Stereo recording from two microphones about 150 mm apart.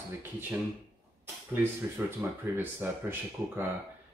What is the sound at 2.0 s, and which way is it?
Speech, 15° right (ahead or behind).